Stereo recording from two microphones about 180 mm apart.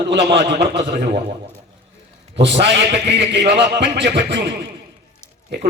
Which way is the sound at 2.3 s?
75° right (ahead or behind).